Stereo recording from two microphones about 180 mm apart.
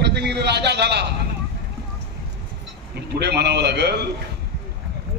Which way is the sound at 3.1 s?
70° right (ahead or behind).